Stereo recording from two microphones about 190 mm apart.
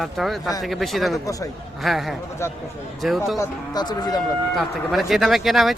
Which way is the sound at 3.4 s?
20° left (ahead or behind).